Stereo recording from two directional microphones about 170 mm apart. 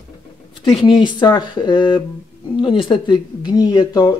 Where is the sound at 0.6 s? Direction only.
30° left (ahead or behind).